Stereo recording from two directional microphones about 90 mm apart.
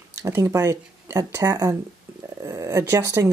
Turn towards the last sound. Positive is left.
turn(degrees=-35)  # may be behind; listen again after turning